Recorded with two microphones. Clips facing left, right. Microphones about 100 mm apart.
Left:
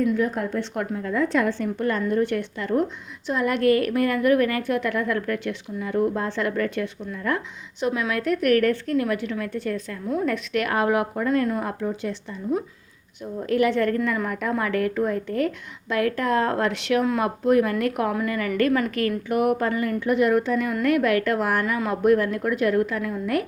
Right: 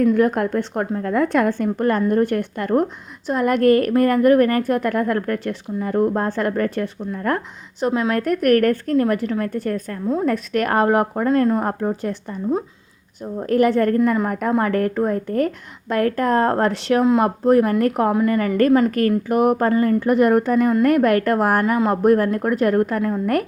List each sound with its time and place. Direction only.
0.0 s a woman's voice: 60° right (ahead or behind)
10.1 s a woman's voice: 35° right (ahead or behind)